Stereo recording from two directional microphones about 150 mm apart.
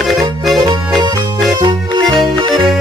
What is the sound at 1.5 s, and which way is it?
Music, 30° right (ahead or behind).